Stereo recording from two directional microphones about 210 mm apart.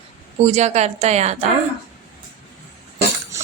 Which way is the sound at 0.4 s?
30° right (ahead or behind).